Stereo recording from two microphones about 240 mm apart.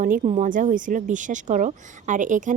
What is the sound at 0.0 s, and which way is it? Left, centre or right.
Speech, right.